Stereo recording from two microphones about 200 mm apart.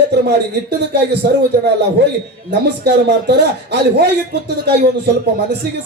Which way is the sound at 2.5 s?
55° right (ahead or behind).